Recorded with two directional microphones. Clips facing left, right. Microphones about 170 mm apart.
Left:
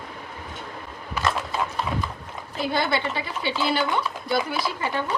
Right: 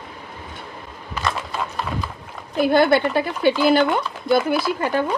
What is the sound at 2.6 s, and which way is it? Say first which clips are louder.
A woman's voice: right 9 dB; 55° right (ahead or behind).